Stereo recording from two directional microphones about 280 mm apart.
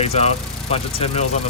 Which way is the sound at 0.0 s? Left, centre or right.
Left.